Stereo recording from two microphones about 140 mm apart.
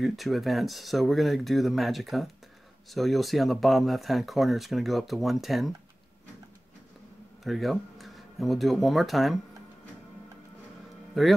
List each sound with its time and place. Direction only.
0.0 s speech: centre (ahead or behind)
7.4 s speech: centre (ahead or behind)
11.2 s speech: centre (ahead or behind)